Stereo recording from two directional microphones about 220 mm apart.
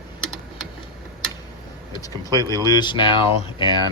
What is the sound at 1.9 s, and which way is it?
Vehicle, 15° left (ahead or behind).